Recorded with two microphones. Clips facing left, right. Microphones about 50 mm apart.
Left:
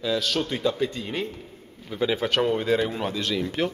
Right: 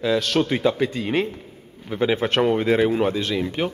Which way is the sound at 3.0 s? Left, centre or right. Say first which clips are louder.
Right 5 dB; right.